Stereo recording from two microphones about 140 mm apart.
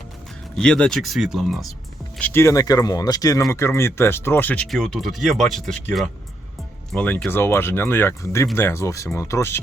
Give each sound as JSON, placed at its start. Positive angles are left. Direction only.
{"t": 0.5, "sound": "speech", "side_deg": 5}
{"t": 2.1, "sound": "speech", "side_deg": 15}